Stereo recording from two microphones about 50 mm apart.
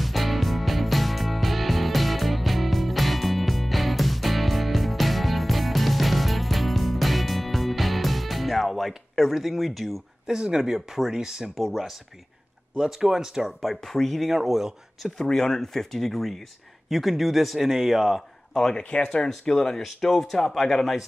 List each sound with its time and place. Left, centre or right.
0.0 s music: centre
10.2 s a man's voice: centre
15.1 s a man's voice: centre
18.8 s a man's voice: left; by 21.0 s centre